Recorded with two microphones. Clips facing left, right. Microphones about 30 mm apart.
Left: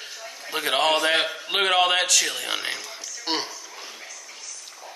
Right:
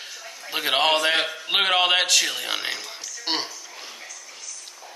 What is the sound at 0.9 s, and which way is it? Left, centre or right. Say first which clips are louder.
A man's voice: even; centre.